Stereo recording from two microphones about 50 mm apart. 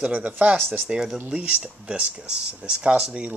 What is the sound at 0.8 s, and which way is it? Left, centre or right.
Speech, centre.